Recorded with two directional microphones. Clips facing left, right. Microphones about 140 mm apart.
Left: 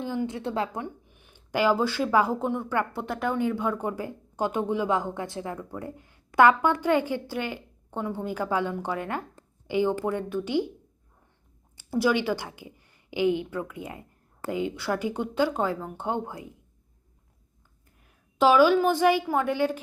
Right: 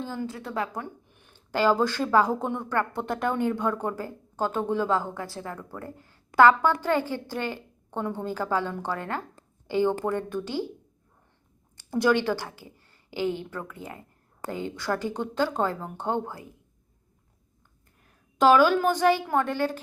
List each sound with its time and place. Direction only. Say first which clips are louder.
0.0 s a woman's voice: left 4 dB; 15° left (ahead or behind)
1.0 s speech: even; 10° left (ahead or behind)
11.8 s a woman's voice: right 1 dB; 5° left (ahead or behind)
18.0 s a woman's voice: right 1 dB; 10° left (ahead or behind)